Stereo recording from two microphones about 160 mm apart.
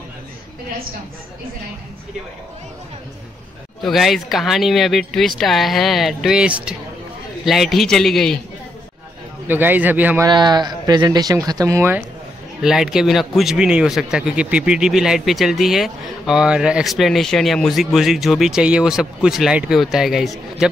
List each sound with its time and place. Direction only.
3.8 s speech: centre (ahead or behind)
9.5 s a man's voice: 10° right (ahead or behind)
10.2 s speech: 25° right (ahead or behind)
12.6 s speech: 5° right (ahead or behind)